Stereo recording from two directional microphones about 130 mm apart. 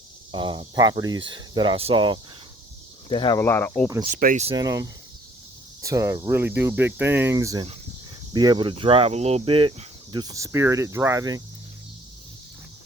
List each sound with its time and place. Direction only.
0.3 s speech: 40° right (ahead or behind)
3.1 s speech: 40° left (ahead or behind)
3.3 s speech: 20° left (ahead or behind)
4.0 s speech: 85° right
4.5 s speech: 25° right (ahead or behind)
7.3 s speech: 25° right (ahead or behind)